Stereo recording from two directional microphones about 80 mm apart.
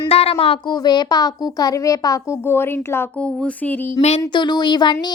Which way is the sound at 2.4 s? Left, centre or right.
Left.